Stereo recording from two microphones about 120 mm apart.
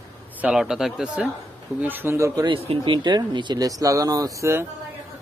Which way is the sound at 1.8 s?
15° right (ahead or behind).